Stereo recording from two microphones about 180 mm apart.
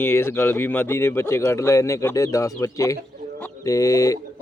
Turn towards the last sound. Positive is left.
turn(degrees=20)  # may be behind; listen again after turning